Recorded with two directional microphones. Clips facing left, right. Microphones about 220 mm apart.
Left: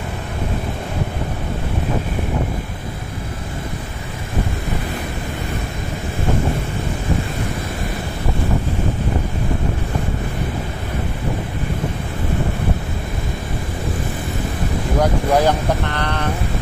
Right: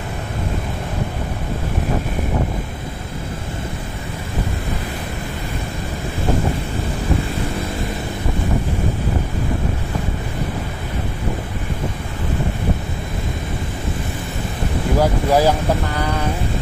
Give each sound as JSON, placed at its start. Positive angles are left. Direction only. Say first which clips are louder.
{"t": 15.0, "sound": "speech", "louder": "even", "side_deg": -5}